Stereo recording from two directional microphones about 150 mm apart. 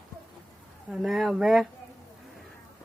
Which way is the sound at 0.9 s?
Centre (ahead or behind).